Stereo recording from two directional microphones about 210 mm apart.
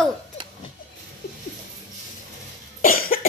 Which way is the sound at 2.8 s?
45° left (ahead or behind).